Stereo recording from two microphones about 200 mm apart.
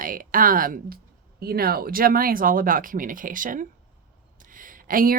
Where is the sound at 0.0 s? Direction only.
45° right (ahead or behind).